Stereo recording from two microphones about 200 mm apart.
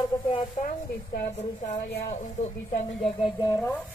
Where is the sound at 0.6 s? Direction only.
45° left (ahead or behind).